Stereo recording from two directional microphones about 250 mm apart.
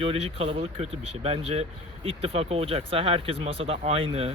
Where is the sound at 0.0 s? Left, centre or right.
Right.